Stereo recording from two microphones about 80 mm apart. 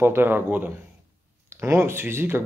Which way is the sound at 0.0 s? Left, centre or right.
Right.